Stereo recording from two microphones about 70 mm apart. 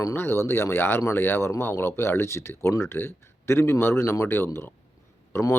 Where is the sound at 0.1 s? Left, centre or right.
Left.